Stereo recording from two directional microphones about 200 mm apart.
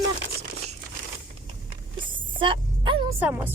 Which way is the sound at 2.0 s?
25° right (ahead or behind).